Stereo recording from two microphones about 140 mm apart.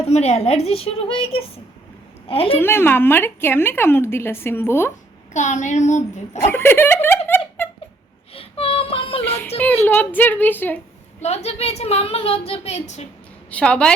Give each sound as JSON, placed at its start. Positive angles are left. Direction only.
{"t": 0.0, "sound": "a woman's voice", "side_deg": 50}
{"t": 2.6, "sound": "a woman's voice", "side_deg": 15}
{"t": 5.3, "sound": "a child's voice", "side_deg": 60}
{"t": 6.4, "sound": "a woman's voice", "side_deg": 15}
{"t": 7.3, "sound": "a sound", "side_deg": 15}
{"t": 8.3, "sound": "child singing", "side_deg": 45}
{"t": 9.6, "sound": "a woman's voice", "side_deg": 15}
{"t": 11.2, "sound": "a woman's voice", "side_deg": 50}
{"t": 13.5, "sound": "a woman's voice", "side_deg": 10}